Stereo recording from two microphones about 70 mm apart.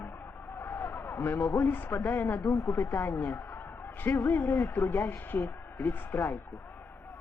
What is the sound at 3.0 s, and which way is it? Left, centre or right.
A man's voice, left.